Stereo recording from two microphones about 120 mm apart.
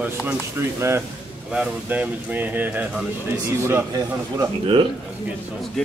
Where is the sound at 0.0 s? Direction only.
15° right (ahead or behind).